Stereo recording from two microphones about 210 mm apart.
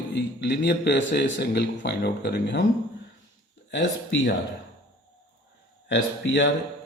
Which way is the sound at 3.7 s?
60° left (ahead or behind).